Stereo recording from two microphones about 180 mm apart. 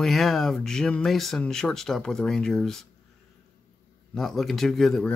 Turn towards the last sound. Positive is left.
turn(degrees=0)  # may be behind; listen again after turning